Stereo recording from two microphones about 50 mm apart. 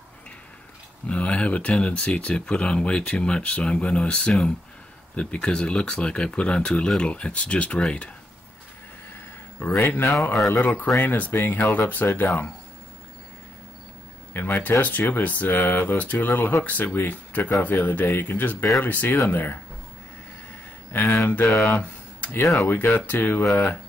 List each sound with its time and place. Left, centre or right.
1.0 s speech: left
9.6 s speech: left
14.3 s speech: left
16.8 s speech: left
17.1 s speech: left
20.9 s speech: left
22.3 s speech: left
22.6 s speech: left